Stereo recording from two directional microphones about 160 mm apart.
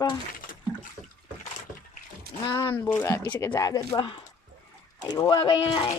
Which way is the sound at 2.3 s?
75° right (ahead or behind).